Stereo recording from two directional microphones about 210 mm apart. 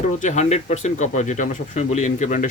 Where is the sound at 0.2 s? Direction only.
35° left (ahead or behind).